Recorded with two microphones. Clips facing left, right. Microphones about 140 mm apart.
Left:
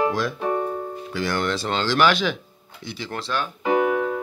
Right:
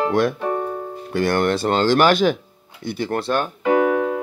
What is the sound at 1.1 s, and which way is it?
Speech, 55° right (ahead or behind).